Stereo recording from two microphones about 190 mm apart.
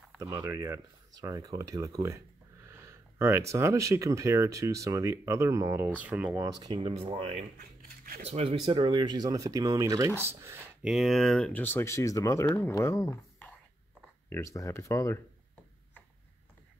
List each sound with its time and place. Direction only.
0.2 s speech: 15° right (ahead or behind)
6.6 s speech: 25° right (ahead or behind)
7.5 s a sound: 50° right (ahead or behind)
8.2 s speech: 35° right (ahead or behind); by 15.1 s 15° left (ahead or behind)